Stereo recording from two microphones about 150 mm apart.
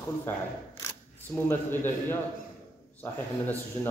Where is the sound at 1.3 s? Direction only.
15° left (ahead or behind).